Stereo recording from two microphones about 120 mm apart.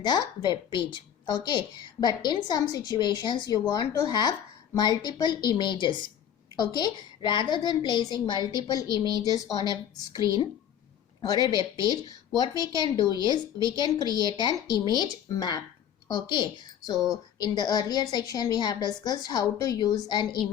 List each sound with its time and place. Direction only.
0.0 s a woman's voice: 40° left (ahead or behind)
9.0 s a woman's voice: 30° right (ahead or behind)
11.3 s a woman's voice: 35° left (ahead or behind)